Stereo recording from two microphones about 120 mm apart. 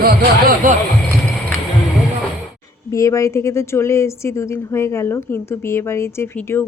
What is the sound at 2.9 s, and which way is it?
A woman's voice, 25° left (ahead or behind).